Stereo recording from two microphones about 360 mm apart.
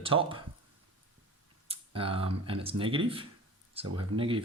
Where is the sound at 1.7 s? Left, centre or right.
Centre.